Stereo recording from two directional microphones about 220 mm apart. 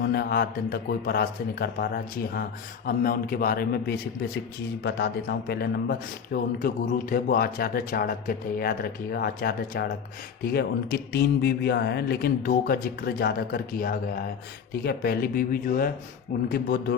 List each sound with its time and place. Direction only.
0.0 s a man's voice: 45° left (ahead or behind)